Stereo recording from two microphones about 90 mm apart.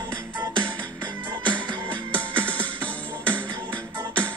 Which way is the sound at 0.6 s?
15° left (ahead or behind).